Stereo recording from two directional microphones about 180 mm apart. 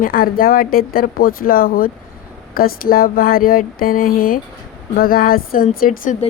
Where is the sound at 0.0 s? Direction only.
55° left (ahead or behind).